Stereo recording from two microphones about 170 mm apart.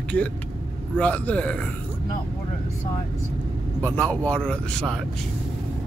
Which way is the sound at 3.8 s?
10° left (ahead or behind).